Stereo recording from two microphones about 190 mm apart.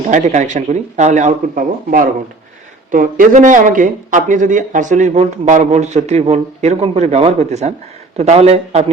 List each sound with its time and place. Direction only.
0.1 s speech: 40° right (ahead or behind)